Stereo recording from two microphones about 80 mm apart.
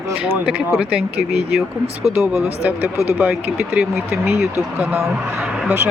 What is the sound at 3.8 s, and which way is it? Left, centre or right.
Speech, centre.